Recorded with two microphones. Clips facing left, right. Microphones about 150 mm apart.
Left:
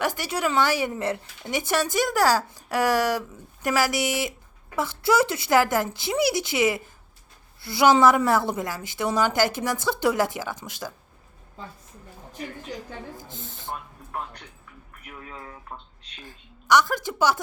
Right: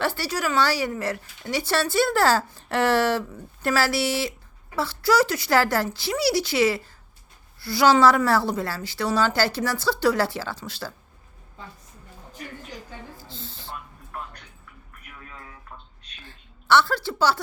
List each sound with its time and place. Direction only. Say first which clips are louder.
0.0 s a woman's voice: even; 15° left (ahead or behind)
13.1 s a sound: left 1 dB; 20° left (ahead or behind)
16.2 s a woman's voice: even; 15° left (ahead or behind)